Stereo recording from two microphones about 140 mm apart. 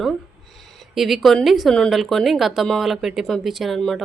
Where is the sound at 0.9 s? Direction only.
Centre (ahead or behind).